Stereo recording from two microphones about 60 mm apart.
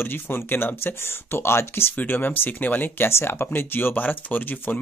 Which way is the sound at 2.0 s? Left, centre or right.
Left.